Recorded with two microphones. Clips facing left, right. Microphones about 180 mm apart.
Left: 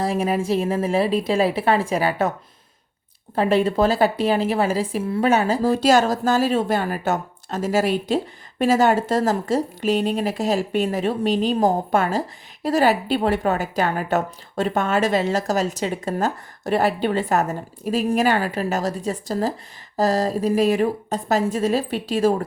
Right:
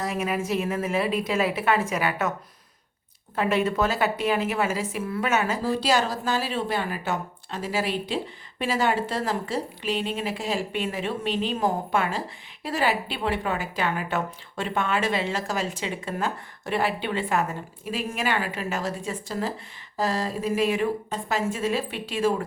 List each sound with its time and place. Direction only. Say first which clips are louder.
0.0 s a woman's voice: left 6 dB; 30° left (ahead or behind)
3.3 s a woman's voice: left 5 dB; 30° left (ahead or behind)
5.7 s a woman's voice: left 7 dB; 45° left (ahead or behind)